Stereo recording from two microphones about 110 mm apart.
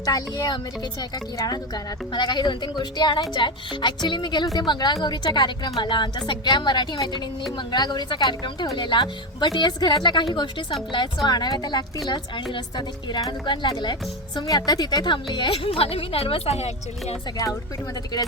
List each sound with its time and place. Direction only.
0.0 s a woman's voice: 35° left (ahead or behind)
2.1 s a woman's voice: 40° left (ahead or behind); by 17.2 s 75° left (ahead or behind)